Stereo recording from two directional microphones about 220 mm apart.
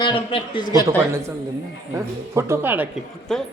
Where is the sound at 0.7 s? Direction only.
15° right (ahead or behind).